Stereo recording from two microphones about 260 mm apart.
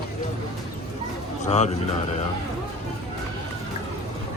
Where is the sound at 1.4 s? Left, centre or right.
Left.